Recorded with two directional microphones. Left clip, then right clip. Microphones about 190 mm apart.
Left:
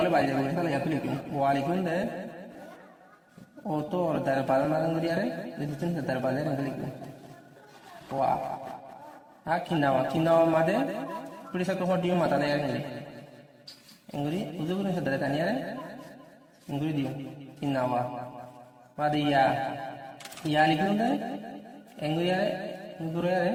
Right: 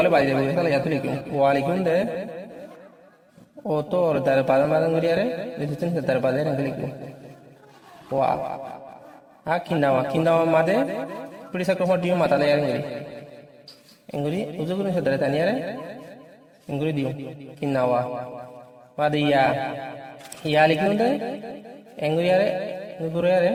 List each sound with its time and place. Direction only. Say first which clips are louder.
0.0 s a man's voice: right 6 dB; 40° right (ahead or behind)
3.7 s a man's voice: right 7 dB; 40° right (ahead or behind)
9.4 s a man's voice: right 5 dB; 35° right (ahead or behind)
17.6 s a man's voice: right 6 dB; 40° right (ahead or behind)